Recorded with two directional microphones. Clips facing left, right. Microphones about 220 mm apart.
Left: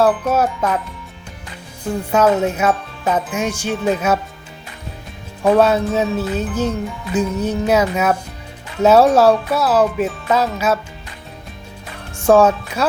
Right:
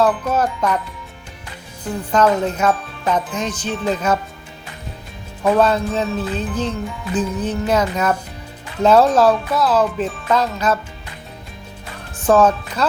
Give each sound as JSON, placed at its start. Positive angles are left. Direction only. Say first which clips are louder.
{"t": 0.0, "sound": "music", "louder": "left 2 dB", "side_deg": 10}
{"t": 1.8, "sound": "music", "louder": "left 1 dB", "side_deg": 10}
{"t": 5.5, "sound": "music", "louder": "left 2 dB", "side_deg": 10}
{"t": 12.1, "sound": "speech", "louder": "left 2 dB", "side_deg": 10}